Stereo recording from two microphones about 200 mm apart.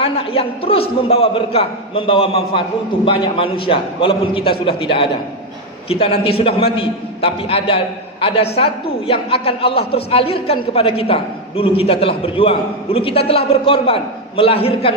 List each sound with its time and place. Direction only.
0.0 s a man's voice: 30° left (ahead or behind)